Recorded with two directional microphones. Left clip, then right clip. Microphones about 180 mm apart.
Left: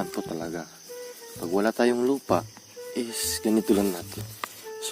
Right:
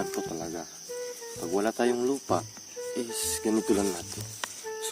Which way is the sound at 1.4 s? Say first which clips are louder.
Left 4 dB; 45° left (ahead or behind).